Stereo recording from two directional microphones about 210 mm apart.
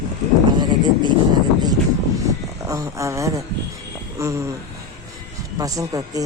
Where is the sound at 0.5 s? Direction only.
20° right (ahead or behind).